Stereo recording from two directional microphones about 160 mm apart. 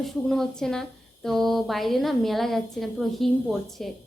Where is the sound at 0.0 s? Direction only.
Centre (ahead or behind).